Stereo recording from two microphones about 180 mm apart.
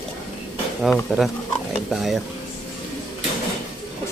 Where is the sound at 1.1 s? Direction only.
Centre (ahead or behind).